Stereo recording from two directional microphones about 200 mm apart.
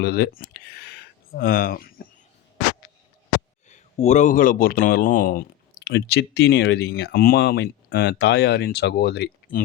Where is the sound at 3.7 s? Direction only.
35° left (ahead or behind).